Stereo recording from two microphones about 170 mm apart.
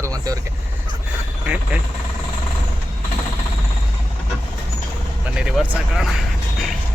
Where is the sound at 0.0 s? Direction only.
20° right (ahead or behind).